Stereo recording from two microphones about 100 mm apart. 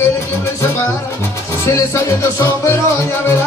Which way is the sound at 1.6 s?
30° left (ahead or behind).